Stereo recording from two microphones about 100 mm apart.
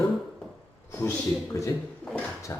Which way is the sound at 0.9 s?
25° left (ahead or behind).